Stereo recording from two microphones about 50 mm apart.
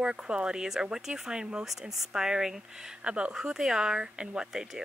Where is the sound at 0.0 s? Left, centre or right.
Centre.